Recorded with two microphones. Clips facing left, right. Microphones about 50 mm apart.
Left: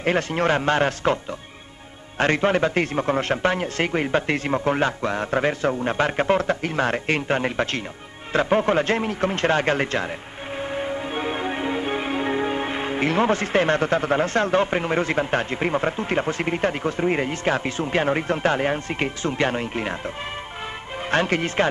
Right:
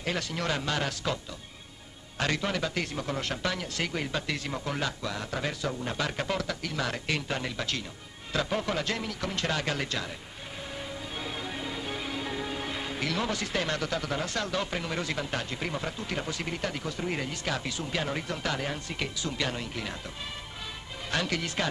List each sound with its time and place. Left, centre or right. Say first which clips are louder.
0.0 s a man's voice: left 11 dB; left
10.6 s music: left 12 dB; left
21.1 s a man's voice: left 9 dB; left